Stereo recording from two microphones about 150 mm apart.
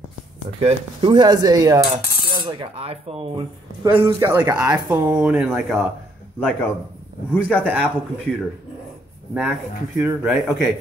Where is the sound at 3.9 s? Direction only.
15° right (ahead or behind).